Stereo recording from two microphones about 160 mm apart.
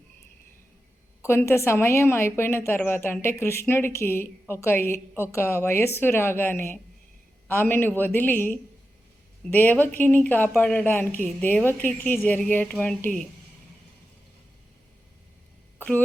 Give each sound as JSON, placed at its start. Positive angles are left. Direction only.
{"t": 1.2, "sound": "a woman's voice", "side_deg": 15}
{"t": 15.8, "sound": "speech", "side_deg": 10}